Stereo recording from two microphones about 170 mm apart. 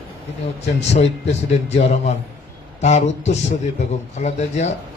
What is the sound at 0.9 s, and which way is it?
A man's voice, 40° left (ahead or behind).